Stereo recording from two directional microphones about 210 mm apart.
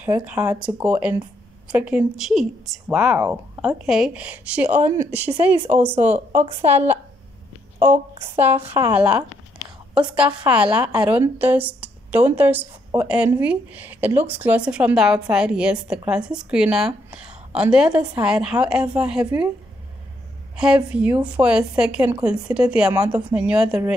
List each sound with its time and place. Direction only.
0.0 s a woman's voice: 10° right (ahead or behind)
5.9 s speech: 30° right (ahead or behind)
6.7 s a woman's voice: 10° right (ahead or behind)
8.4 s a woman's voice: 10° right (ahead or behind)
20.5 s speech: 5° right (ahead or behind)